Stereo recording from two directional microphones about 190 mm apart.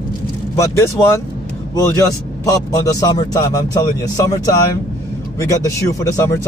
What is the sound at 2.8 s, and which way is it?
Speech, 15° left (ahead or behind).